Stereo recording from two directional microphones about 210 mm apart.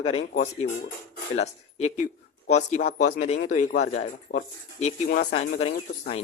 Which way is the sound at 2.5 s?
35° left (ahead or behind).